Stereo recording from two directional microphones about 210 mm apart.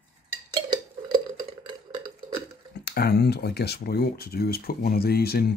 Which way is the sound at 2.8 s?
50° left (ahead or behind).